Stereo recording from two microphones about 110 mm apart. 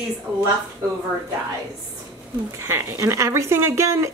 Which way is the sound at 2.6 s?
25° right (ahead or behind).